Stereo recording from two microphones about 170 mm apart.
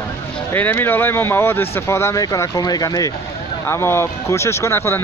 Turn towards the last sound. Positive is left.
turn(degrees=15)  # may be behind; listen again after turning